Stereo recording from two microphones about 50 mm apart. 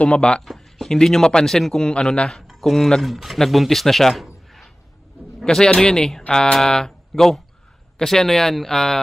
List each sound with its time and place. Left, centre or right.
0.0 s speech: left
0.5 s a sound: centre
0.9 s a man's voice: centre
5.4 s a man's voice: centre